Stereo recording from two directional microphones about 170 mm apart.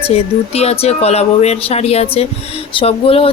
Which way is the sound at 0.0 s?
35° left (ahead or behind).